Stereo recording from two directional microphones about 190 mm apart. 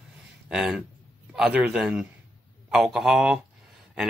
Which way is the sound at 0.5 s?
5° right (ahead or behind).